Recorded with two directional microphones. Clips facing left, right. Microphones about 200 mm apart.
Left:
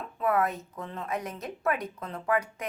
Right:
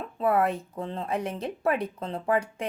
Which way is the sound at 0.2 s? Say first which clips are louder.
Right 3 dB; 30° right (ahead or behind).